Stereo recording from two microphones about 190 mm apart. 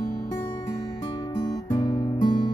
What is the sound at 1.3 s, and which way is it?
Music, 20° left (ahead or behind).